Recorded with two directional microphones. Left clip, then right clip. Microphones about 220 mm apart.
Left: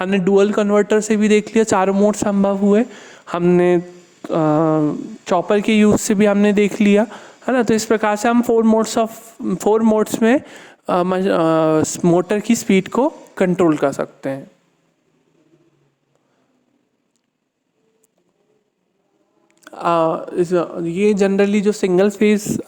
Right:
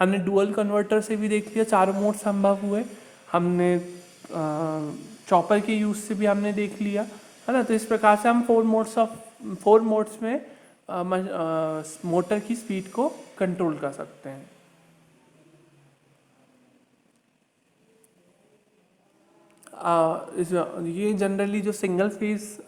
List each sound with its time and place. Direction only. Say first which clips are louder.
0.0 s speech: left 7 dB; 35° left (ahead or behind)
19.6 s speech: left 5 dB; 35° left (ahead or behind)